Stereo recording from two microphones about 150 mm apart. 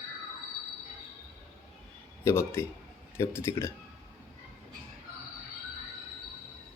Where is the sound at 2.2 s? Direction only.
15° left (ahead or behind).